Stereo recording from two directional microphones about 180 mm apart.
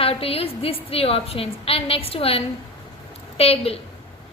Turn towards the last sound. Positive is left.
turn(degrees=35)  # may be behind; listen again after turning